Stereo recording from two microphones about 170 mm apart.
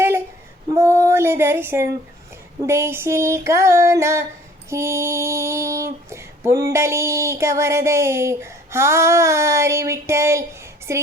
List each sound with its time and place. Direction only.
0.7 s female singing: 15° right (ahead or behind)